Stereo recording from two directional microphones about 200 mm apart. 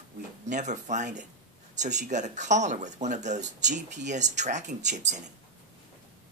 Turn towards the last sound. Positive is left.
turn(degrees=-35)  # may be behind; listen again after turning